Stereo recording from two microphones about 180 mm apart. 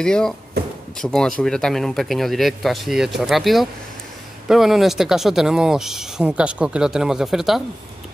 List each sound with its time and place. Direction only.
0.0 s speech: 5° left (ahead or behind)